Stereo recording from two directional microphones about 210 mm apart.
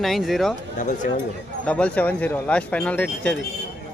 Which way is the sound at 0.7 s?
35° left (ahead or behind).